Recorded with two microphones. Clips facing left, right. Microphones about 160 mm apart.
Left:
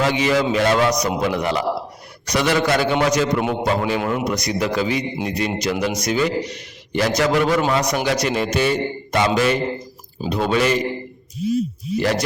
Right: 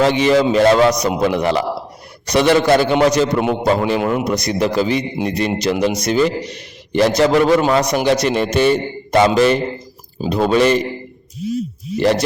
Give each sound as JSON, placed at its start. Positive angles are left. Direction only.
{"t": 0.0, "sound": "a man's voice", "side_deg": -30}
{"t": 11.9, "sound": "a man's voice", "side_deg": -30}